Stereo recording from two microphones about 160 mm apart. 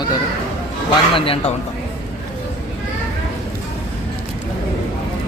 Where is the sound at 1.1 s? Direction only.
35° left (ahead or behind).